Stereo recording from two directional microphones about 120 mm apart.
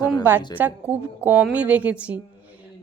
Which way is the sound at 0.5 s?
15° right (ahead or behind).